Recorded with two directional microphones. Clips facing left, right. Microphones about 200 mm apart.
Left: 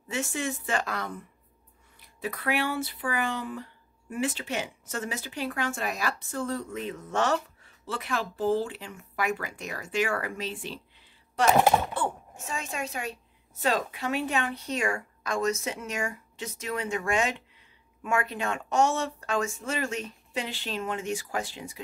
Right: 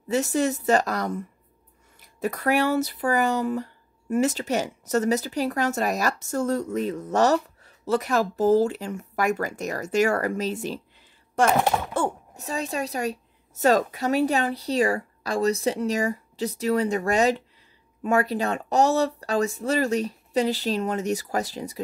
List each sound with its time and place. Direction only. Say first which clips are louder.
0.1 s speech: right 8 dB; 40° right (ahead or behind)
11.9 s speech: right 5 dB; 40° right (ahead or behind)